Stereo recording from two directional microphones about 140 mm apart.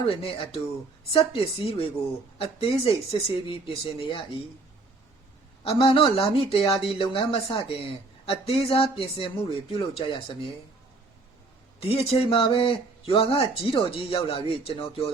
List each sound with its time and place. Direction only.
0.0 s speech: 40° left (ahead or behind)
5.6 s speech: 40° left (ahead or behind)
11.8 s speech: 45° left (ahead or behind)